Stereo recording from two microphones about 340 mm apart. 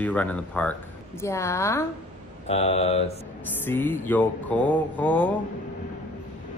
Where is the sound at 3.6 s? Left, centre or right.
Centre.